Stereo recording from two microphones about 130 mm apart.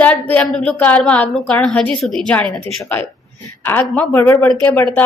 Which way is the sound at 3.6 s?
15° left (ahead or behind).